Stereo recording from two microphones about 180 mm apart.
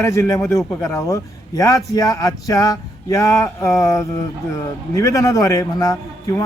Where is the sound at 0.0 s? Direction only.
15° left (ahead or behind).